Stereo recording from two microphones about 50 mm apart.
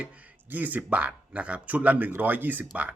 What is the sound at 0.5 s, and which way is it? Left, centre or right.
Speech, right.